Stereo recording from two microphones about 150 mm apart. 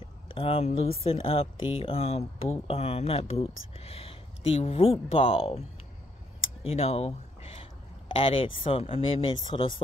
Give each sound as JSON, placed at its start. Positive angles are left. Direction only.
{"t": 0.3, "sound": "speech", "side_deg": 40}
{"t": 6.6, "sound": "a sound", "side_deg": 40}
{"t": 8.1, "sound": "speech", "side_deg": 35}